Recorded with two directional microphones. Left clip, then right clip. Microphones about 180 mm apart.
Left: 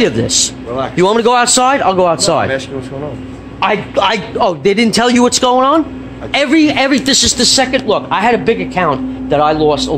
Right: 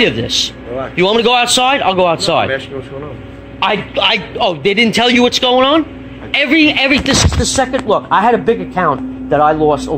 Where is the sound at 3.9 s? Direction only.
25° left (ahead or behind).